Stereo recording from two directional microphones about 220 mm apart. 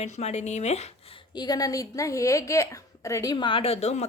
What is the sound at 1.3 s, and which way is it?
A woman's voice, 20° left (ahead or behind).